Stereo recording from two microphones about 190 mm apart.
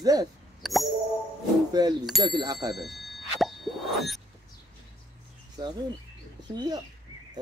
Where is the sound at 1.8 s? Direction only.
20° right (ahead or behind).